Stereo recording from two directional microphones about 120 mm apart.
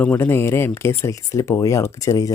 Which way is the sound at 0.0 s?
15° left (ahead or behind).